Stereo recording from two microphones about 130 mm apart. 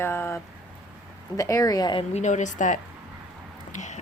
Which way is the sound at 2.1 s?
65° left (ahead or behind).